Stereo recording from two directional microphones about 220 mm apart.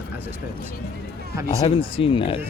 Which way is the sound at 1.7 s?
25° left (ahead or behind).